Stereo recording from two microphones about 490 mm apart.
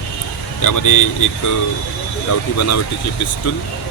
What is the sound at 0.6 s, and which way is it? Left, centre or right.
Speech, left.